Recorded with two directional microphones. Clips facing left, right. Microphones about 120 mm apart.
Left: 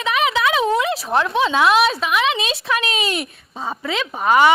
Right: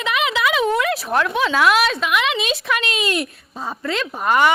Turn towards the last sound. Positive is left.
turn(degrees=5)  # may be behind; listen again after turning